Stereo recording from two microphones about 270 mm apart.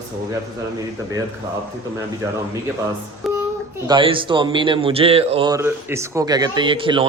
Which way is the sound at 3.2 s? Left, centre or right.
Centre.